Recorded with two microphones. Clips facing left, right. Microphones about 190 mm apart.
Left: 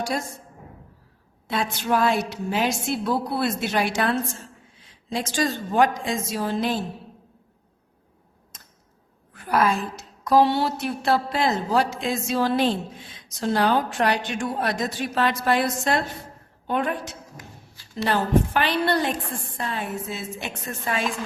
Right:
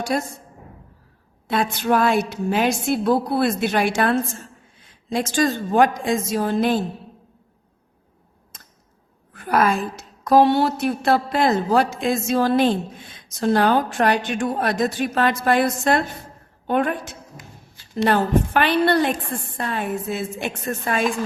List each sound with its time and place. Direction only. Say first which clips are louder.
0.1 s a woman's voice: right 8 dB; 55° right (ahead or behind)
1.5 s a woman's voice: right 4 dB; 55° right (ahead or behind)
9.4 s a woman's voice: right 2 dB; 50° right (ahead or behind)